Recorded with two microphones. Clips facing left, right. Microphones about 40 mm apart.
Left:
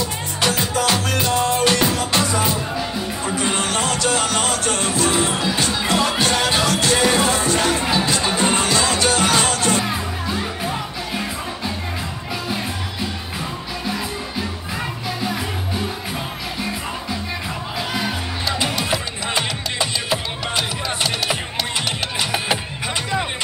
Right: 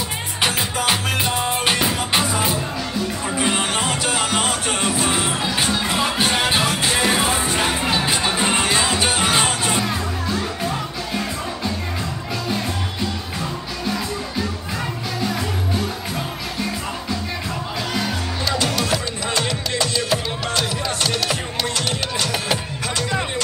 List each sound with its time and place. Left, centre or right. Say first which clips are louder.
0.4 s music: left 2 dB; right
9.8 s music: even; centre
13.4 s music: right 1 dB; centre
17.9 s music: right 1 dB; centre